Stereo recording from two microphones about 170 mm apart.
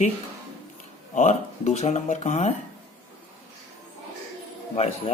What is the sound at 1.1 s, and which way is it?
Speech, 45° left (ahead or behind).